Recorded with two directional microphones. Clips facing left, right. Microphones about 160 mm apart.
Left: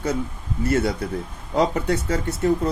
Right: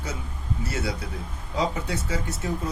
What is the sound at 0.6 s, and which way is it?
Speech, 55° left (ahead or behind).